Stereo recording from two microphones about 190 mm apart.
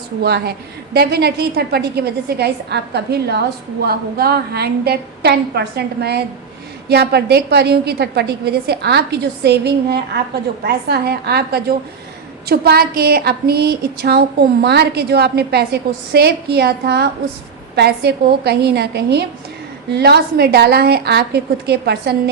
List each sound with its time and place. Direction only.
0.2 s a woman's voice: 55° right (ahead or behind)